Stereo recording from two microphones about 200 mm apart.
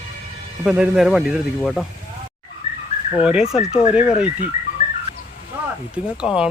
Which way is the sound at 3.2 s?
5° right (ahead or behind).